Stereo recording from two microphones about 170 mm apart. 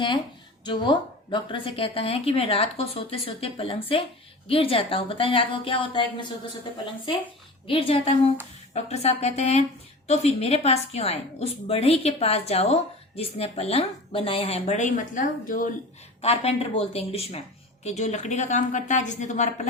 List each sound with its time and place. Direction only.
0.6 s a woman's voice: 25° left (ahead or behind)
7.7 s a woman's voice: 35° left (ahead or behind); by 15.7 s 50° left (ahead or behind)
16.2 s a woman's voice: 35° left (ahead or behind)